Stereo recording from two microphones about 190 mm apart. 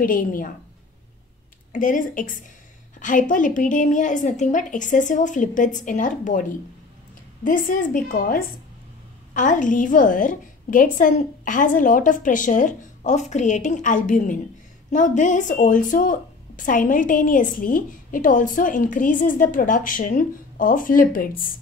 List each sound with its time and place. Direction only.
0.0 s speech: 45° left (ahead or behind)
1.7 s speech: 45° left (ahead or behind)
7.4 s speech: 45° left (ahead or behind)